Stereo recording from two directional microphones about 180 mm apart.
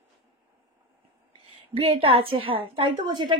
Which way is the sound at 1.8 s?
30° right (ahead or behind).